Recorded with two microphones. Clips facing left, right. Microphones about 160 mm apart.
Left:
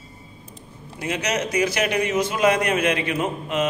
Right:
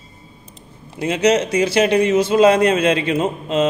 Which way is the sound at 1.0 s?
25° right (ahead or behind).